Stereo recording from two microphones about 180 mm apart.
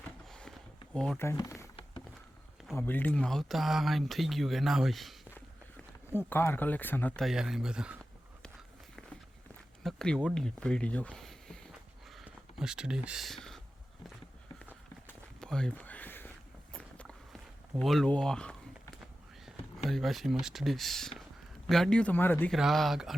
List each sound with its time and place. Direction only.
0.3 s a sound: 5° left (ahead or behind)
0.9 s speech: 5° left (ahead or behind)
1.2 s speech: 15° left (ahead or behind)
2.7 s speech: 10° left (ahead or behind)
6.1 s speech: 10° left (ahead or behind)
7.3 s speech: 5° right (ahead or behind)
9.8 s speech: 5° left (ahead or behind)
12.1 s a sound: 5° right (ahead or behind)
15.0 s walk: 5° left (ahead or behind)
16.7 s a sound: 5° left (ahead or behind)
17.7 s speech: centre (ahead or behind)
22.5 s speech: centre (ahead or behind)